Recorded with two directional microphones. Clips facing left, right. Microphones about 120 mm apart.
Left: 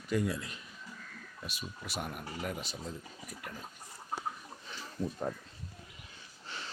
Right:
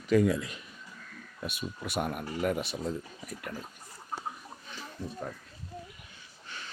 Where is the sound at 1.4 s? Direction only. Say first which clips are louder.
Right 7 dB; 60° right (ahead or behind).